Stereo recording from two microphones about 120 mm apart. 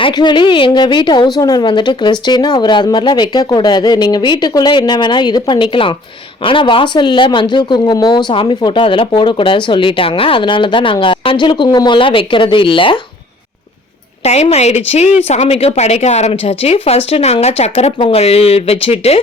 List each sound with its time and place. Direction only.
0.0 s speech: 40° left (ahead or behind)
14.3 s a woman's voice: 60° left (ahead or behind)